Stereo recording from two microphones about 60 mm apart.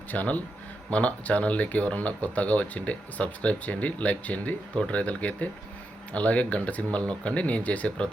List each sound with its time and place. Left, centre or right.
0.1 s speech: left